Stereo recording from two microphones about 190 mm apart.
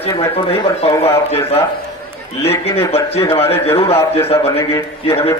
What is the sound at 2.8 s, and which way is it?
A man's voice, 30° left (ahead or behind).